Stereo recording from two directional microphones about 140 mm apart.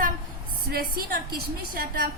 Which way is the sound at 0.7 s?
90° right.